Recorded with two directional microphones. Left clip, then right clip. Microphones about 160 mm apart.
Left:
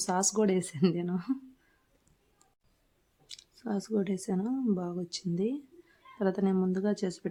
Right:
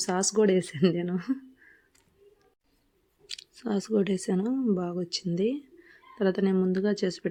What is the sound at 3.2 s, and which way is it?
Speech, 20° right (ahead or behind).